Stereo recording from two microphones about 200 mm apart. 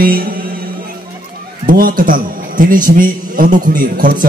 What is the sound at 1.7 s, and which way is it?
A man's voice, 45° right (ahead or behind).